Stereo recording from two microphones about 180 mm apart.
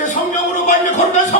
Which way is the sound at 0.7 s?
40° left (ahead or behind).